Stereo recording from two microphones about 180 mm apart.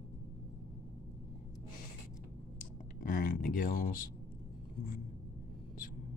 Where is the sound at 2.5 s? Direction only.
50° left (ahead or behind).